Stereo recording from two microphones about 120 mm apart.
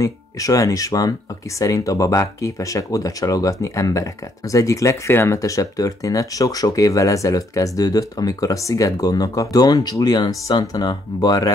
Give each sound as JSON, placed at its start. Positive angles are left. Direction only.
{"t": 0.0, "sound": "speech", "side_deg": 30}